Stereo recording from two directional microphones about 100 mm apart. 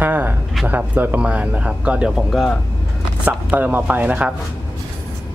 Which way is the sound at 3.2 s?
15° right (ahead or behind).